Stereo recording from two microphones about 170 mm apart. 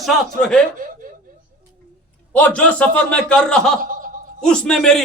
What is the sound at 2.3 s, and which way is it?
A man's voice, 5° left (ahead or behind).